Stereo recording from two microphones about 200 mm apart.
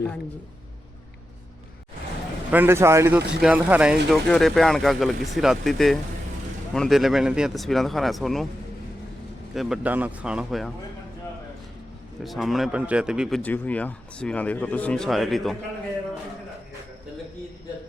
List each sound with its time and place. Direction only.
2.5 s a man's voice: 10° right (ahead or behind)
9.6 s a man's voice: 5° right (ahead or behind)
12.2 s a man's voice: centre (ahead or behind)